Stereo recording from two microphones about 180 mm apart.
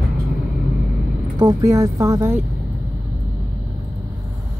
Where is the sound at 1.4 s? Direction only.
20° right (ahead or behind).